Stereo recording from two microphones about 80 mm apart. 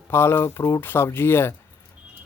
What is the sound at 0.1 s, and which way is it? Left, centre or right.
A man's voice, left.